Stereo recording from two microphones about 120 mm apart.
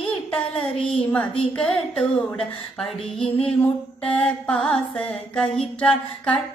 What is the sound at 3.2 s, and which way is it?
Speech, 55° left (ahead or behind).